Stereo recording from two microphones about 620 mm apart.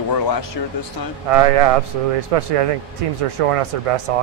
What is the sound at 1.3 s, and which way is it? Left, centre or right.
Speech, right.